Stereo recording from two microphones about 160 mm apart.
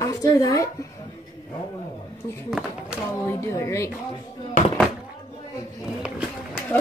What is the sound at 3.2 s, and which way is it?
Speech, 15° left (ahead or behind).